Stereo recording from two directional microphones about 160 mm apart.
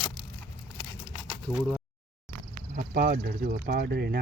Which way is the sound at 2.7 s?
65° right (ahead or behind).